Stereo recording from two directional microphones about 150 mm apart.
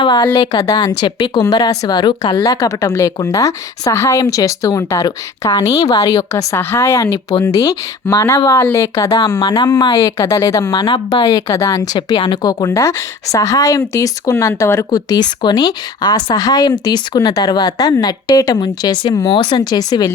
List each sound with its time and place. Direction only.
0.0 s a woman's voice: 30° left (ahead or behind)